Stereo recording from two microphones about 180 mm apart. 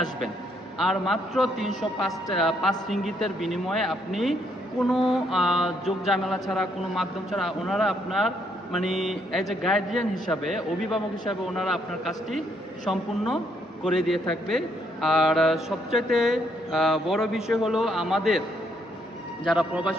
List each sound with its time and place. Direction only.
0.8 s speech: centre (ahead or behind)
12.8 s speech: centre (ahead or behind)
19.5 s speech: 5° right (ahead or behind)